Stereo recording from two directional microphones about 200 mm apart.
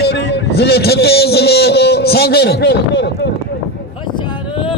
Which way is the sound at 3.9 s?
25° left (ahead or behind).